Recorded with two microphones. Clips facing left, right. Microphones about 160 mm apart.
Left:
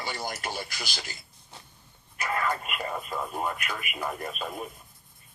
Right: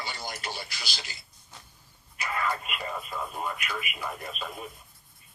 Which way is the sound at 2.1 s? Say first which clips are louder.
Left 2 dB; 50° left (ahead or behind).